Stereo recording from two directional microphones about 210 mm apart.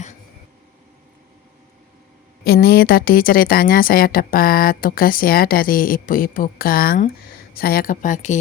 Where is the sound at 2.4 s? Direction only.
50° left (ahead or behind).